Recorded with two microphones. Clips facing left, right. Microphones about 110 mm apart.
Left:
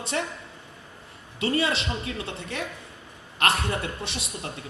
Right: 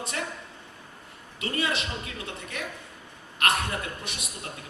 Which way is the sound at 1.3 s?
30° left (ahead or behind).